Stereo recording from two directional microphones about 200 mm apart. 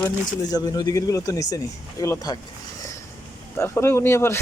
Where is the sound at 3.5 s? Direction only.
10° left (ahead or behind).